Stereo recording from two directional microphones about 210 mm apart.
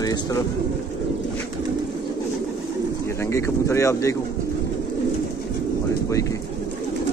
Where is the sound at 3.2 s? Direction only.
10° left (ahead or behind).